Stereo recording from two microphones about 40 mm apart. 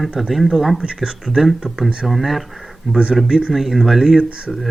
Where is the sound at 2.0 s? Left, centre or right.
Centre.